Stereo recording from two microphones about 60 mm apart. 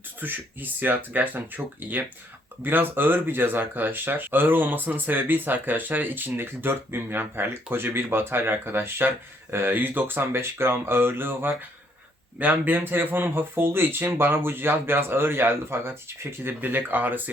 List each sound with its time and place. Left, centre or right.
0.2 s speech: right